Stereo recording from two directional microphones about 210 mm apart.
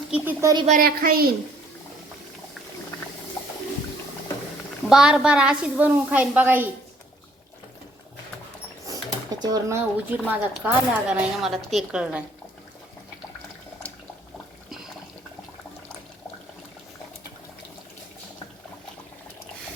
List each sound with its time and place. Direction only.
0.1 s a woman's voice: 10° right (ahead or behind)
0.5 s speech: 30° right (ahead or behind)
0.8 s a woman's voice: 45° right (ahead or behind)
4.9 s a woman's voice: 5° right (ahead or behind)
8.9 s a sound: 15° right (ahead or behind)
10.2 s a woman's voice: 5° right (ahead or behind)